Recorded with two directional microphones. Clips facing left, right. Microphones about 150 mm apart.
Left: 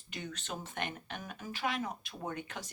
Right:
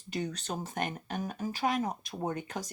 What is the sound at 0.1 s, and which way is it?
Speech, 35° right (ahead or behind).